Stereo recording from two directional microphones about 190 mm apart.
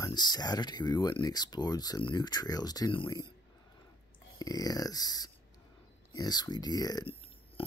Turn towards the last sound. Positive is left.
turn(degrees=25)  # may be behind; listen again after turning